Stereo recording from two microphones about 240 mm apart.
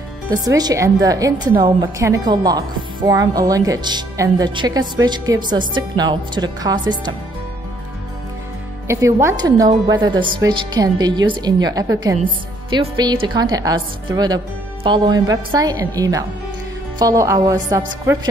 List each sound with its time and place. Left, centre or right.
0.3 s a woman's voice: centre
8.8 s a woman's voice: centre